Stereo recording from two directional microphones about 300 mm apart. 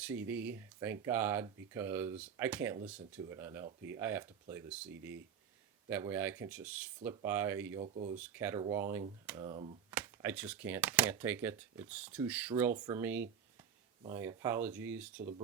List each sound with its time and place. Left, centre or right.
0.1 s speech: centre
5.9 s speech: centre
7.8 s speech: centre
8.2 s speech: centre
9.9 s speech: centre